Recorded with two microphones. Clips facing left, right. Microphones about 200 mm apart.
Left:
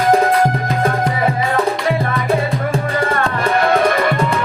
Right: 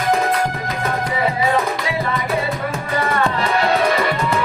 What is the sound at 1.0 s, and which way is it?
Music, 50° left (ahead or behind).